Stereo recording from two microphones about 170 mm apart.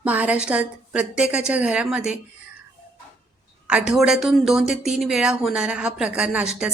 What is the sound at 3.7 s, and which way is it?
Speech, 5° right (ahead or behind).